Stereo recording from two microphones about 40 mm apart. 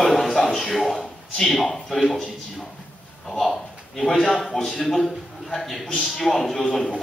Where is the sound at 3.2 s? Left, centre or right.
Centre.